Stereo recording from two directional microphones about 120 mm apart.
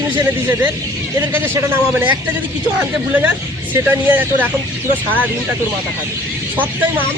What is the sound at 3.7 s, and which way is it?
Speech, 15° right (ahead or behind).